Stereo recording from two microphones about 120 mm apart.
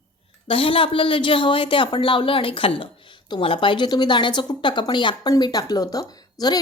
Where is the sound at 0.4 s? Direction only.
45° left (ahead or behind).